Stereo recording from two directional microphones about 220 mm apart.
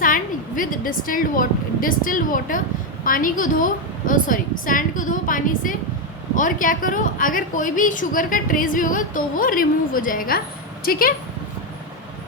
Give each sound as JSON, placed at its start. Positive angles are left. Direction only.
{"t": 0.0, "sound": "a woman's voice", "side_deg": 40}